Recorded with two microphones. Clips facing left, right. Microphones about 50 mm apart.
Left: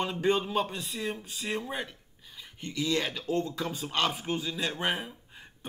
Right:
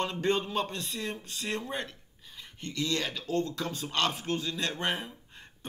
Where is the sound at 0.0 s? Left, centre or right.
Centre.